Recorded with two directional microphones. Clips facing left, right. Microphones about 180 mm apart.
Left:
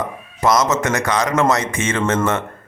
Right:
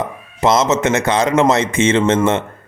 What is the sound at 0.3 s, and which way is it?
A man's voice, 25° right (ahead or behind).